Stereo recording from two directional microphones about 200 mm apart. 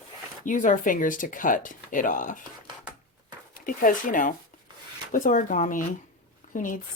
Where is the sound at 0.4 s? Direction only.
40° left (ahead or behind).